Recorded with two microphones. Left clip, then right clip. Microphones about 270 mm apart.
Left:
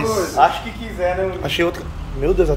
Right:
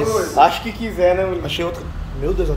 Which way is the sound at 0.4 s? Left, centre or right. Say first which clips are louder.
Right 1 dB; right.